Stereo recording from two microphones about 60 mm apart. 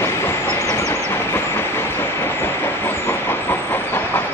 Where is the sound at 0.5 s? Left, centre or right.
Left.